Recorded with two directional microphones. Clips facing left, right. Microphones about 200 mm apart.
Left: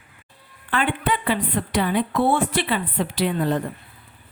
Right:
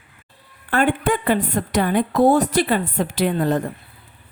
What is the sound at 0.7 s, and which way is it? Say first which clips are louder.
A woman's voice: right 4 dB; 45° right (ahead or behind).